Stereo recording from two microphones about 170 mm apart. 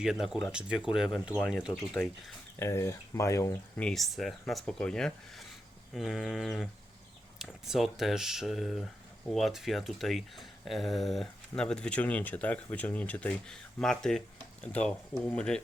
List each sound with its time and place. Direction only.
0.0 s speech: 5° right (ahead or behind)
2.6 s speech: 15° left (ahead or behind)
3.8 s speech: centre (ahead or behind)